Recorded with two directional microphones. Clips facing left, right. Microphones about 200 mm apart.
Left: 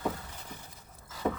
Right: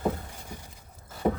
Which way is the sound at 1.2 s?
30° right (ahead or behind).